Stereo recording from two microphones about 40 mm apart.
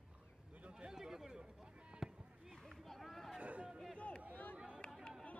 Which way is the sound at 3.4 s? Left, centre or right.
Right.